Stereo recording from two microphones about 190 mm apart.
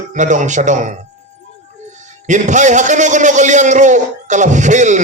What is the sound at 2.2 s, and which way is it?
A man's voice, 40° right (ahead or behind).